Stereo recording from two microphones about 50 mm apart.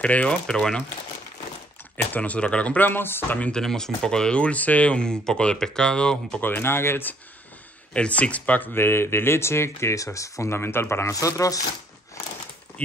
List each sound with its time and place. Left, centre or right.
0.0 s speech: left
2.0 s speech: left
2.9 s speech: left
3.5 s speech: centre
6.4 s speech: left
7.9 s speech: left
8.7 s speech: left
10.5 s speech: left